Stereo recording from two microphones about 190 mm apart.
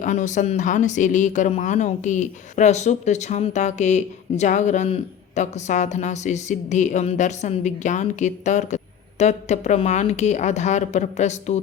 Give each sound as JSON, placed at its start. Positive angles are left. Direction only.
{"t": 0.0, "sound": "speech", "side_deg": 40}